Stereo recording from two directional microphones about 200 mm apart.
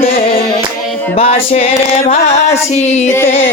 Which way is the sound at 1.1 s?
30° left (ahead or behind).